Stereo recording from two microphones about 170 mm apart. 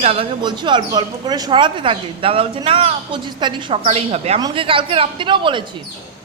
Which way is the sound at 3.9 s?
40° right (ahead or behind).